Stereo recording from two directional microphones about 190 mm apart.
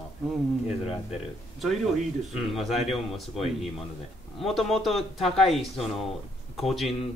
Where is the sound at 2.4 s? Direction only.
Centre (ahead or behind).